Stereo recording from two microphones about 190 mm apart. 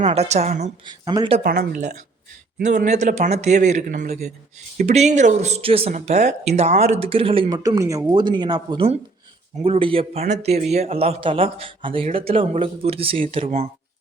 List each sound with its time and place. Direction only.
0.0 s speech: 35° right (ahead or behind)
0.9 s speech: 20° right (ahead or behind)
1.5 s a woman's voice: 50° right (ahead or behind)
2.8 s speech: 40° right (ahead or behind)